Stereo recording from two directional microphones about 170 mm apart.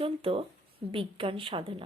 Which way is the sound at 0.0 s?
35° right (ahead or behind).